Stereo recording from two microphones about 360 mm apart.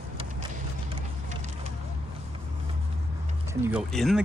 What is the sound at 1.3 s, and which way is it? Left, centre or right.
Vehicle, centre.